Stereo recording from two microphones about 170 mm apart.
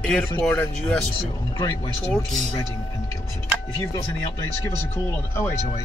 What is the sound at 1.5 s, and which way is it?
Speech, 20° left (ahead or behind).